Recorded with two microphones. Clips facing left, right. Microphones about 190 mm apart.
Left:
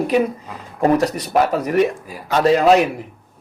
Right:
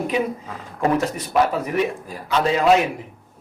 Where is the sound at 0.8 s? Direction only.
40° left (ahead or behind).